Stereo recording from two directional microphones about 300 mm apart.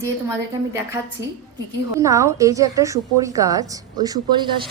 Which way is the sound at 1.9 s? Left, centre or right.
Centre.